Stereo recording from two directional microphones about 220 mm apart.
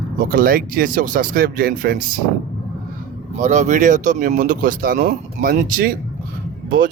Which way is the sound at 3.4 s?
35° right (ahead or behind).